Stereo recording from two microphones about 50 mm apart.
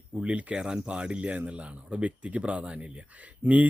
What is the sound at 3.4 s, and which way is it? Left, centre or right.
Speech, right.